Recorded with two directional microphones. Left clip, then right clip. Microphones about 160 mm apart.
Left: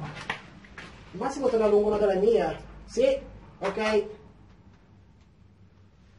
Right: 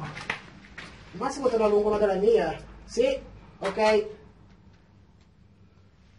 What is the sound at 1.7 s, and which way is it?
Speech, 30° right (ahead or behind).